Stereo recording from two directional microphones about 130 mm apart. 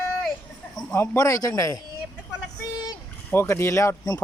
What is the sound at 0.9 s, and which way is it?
Speech, 25° left (ahead or behind).